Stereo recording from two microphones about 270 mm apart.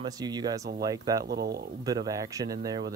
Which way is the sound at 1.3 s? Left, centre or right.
Right.